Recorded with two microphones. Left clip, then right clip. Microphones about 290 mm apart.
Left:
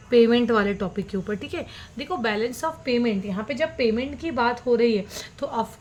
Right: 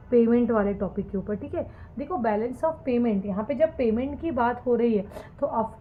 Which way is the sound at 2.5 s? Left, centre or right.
Left.